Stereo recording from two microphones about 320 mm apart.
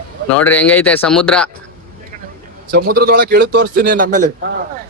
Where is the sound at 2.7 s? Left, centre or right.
Right.